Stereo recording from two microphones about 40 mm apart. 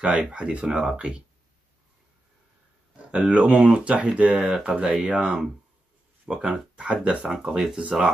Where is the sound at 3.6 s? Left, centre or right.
Right.